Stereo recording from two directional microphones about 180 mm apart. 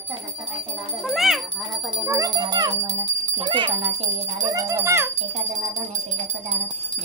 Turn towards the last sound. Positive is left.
turn(degrees=-15)  # may be behind; listen again after turning